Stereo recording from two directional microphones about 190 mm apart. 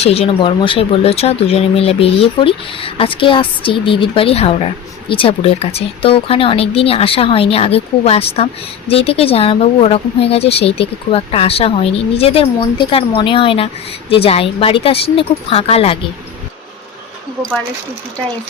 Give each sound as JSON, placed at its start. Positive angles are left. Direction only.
{"t": 0.0, "sound": "speech", "side_deg": 30}